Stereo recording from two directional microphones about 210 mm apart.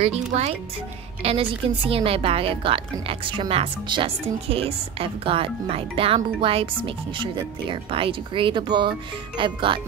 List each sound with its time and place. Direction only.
0.0 s a woman's voice: 30° right (ahead or behind)